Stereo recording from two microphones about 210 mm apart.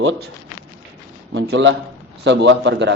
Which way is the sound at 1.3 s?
60° right (ahead or behind).